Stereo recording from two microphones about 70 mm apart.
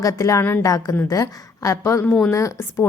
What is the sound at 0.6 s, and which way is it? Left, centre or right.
A woman's voice, left.